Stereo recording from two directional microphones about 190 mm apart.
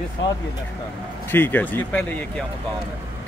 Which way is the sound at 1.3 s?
10° left (ahead or behind).